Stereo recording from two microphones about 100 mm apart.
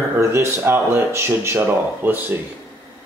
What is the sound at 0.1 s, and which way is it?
Speech, 25° right (ahead or behind).